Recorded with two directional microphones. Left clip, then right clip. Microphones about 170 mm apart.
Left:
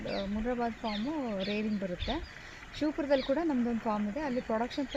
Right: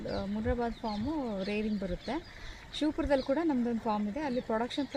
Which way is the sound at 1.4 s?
40° right (ahead or behind).